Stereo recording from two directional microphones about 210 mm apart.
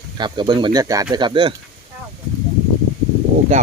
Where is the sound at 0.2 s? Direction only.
20° right (ahead or behind).